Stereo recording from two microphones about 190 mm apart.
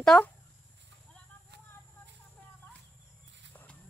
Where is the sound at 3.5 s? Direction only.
10° left (ahead or behind).